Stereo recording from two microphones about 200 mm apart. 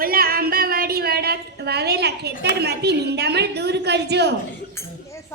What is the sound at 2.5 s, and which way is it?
A man's voice, 55° right (ahead or behind).